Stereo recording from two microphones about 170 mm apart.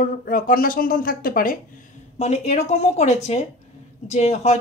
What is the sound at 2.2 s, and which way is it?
Speech, 40° left (ahead or behind).